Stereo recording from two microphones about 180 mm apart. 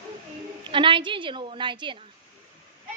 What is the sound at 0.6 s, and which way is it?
A woman's voice, 30° right (ahead or behind).